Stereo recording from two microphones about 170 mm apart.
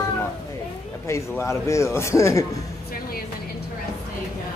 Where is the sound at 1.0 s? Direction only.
15° left (ahead or behind).